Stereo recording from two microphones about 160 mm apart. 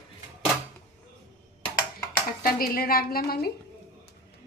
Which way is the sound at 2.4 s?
65° left (ahead or behind).